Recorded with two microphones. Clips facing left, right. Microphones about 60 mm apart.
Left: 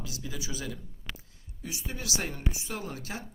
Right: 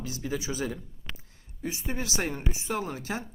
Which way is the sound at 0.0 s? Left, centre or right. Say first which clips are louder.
Right 6 dB; right.